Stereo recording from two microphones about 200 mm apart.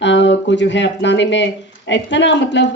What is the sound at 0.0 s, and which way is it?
A woman's voice, 65° left (ahead or behind).